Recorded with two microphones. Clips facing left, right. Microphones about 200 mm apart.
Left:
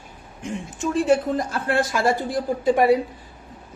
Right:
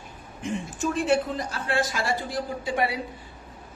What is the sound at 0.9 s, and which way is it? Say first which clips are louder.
Speech: left 5 dB; 40° left (ahead or behind).